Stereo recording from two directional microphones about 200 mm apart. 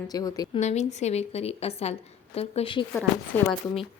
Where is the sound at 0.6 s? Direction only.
35° left (ahead or behind).